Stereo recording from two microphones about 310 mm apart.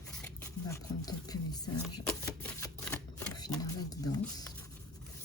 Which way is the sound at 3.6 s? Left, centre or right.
Centre.